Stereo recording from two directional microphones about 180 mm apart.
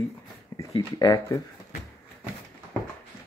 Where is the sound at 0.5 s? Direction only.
20° left (ahead or behind).